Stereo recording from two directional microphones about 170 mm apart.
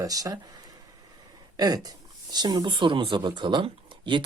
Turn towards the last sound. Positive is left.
turn(degrees=-30)  # may be behind; listen again after turning